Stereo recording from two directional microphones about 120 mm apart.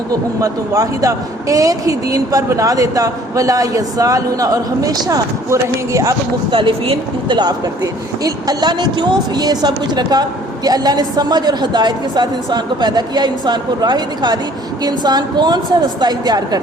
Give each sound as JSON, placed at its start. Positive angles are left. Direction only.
{"t": 0.4, "sound": "speech", "side_deg": -30}
{"t": 6.5, "sound": "a woman's voice", "side_deg": -45}
{"t": 7.3, "sound": "speech", "side_deg": -35}